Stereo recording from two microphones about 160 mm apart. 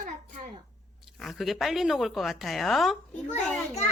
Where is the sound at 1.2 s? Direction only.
Centre (ahead or behind).